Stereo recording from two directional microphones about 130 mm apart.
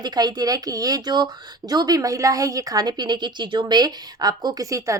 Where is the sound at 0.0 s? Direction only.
30° right (ahead or behind).